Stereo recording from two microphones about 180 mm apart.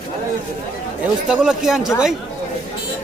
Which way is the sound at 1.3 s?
5° right (ahead or behind).